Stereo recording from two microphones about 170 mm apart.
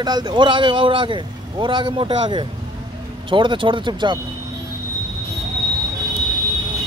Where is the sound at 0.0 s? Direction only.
25° right (ahead or behind).